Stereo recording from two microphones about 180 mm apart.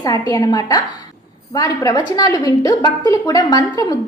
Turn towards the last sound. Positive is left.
turn(degrees=20)  # may be behind; listen again after turning